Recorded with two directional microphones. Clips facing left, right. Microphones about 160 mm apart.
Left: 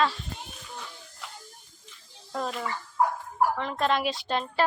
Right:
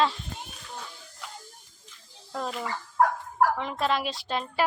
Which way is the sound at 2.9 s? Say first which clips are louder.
Right 2 dB; 90° right.